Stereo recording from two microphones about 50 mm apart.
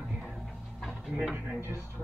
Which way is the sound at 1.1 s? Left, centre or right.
Right.